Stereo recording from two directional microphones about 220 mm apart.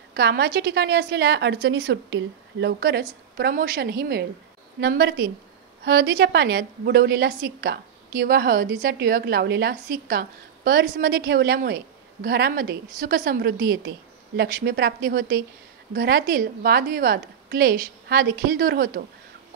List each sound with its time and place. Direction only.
0.1 s a woman's voice: 45° right (ahead or behind)